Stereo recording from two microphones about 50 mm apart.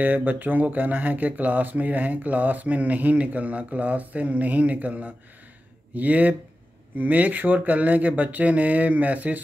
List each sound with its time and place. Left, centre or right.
0.0 s speech: right